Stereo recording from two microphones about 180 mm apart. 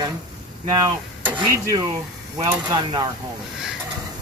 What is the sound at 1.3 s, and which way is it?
Speech, 20° right (ahead or behind).